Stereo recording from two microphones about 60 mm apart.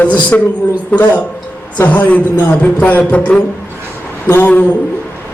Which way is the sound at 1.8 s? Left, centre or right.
Left.